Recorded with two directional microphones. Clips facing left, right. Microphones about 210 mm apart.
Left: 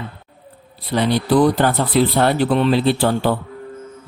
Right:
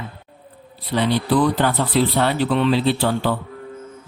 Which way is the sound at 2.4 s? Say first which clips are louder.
Left 2 dB; 40° left (ahead or behind).